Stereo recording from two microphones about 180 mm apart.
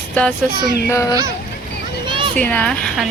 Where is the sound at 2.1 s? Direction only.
30° right (ahead or behind).